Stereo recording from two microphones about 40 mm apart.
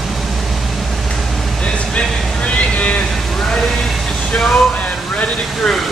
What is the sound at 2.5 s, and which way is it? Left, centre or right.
Boat, left.